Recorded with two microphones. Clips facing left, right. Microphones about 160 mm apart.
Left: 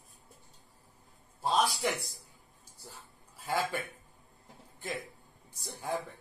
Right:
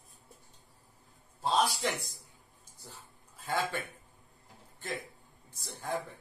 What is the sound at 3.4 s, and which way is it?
Speech, 10° left (ahead or behind).